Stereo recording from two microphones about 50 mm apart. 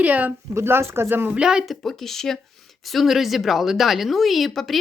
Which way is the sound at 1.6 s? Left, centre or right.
Centre.